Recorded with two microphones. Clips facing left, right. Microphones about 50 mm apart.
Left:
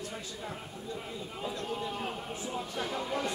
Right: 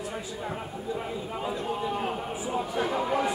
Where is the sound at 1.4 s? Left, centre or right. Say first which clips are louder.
Right 4 dB; centre.